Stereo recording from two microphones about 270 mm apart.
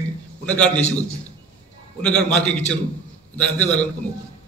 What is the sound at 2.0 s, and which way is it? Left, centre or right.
A man's voice, centre.